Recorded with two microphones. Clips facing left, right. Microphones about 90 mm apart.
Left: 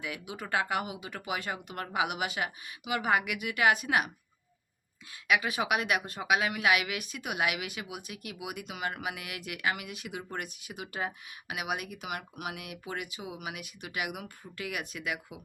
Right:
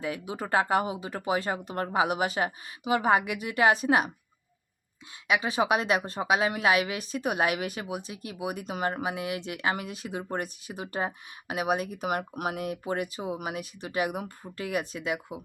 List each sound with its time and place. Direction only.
0.0 s speech: 35° right (ahead or behind)
5.3 s speech: 30° right (ahead or behind)